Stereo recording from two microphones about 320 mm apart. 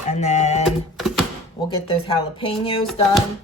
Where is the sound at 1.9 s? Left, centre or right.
Centre.